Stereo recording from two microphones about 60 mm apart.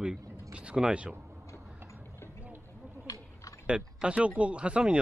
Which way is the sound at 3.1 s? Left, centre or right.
Left.